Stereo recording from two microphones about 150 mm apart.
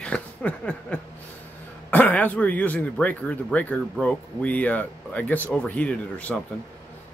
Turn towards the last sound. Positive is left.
turn(degrees=10)  # may be behind; listen again after turning